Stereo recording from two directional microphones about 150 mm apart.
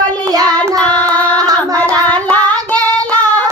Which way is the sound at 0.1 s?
25° right (ahead or behind).